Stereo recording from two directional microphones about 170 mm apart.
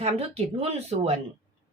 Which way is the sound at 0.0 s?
35° right (ahead or behind).